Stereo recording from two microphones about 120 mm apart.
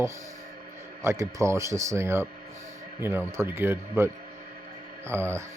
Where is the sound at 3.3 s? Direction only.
20° right (ahead or behind).